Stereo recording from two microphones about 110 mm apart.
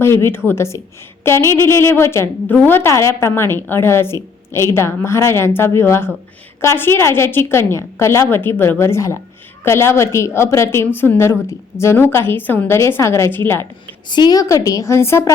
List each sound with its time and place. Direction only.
0.0 s a woman's voice: 20° left (ahead or behind)
14.1 s a woman's voice: 40° left (ahead or behind); by 15.3 s 25° left (ahead or behind)